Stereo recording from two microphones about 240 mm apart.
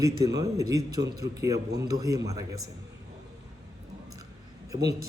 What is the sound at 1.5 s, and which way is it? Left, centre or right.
Speech, right.